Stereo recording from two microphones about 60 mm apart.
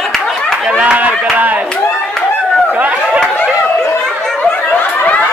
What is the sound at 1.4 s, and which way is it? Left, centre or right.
Clapping, right.